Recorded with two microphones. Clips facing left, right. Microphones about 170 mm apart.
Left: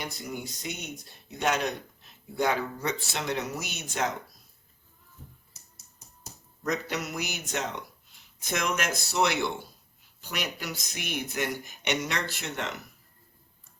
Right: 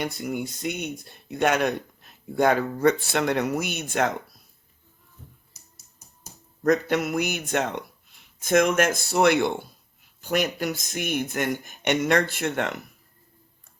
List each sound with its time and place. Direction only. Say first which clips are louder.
0.0 s speech: right 8 dB; 55° right (ahead or behind)
6.6 s speech: right 9 dB; 50° right (ahead or behind)